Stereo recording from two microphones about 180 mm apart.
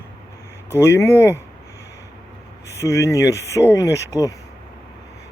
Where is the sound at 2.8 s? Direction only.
15° left (ahead or behind).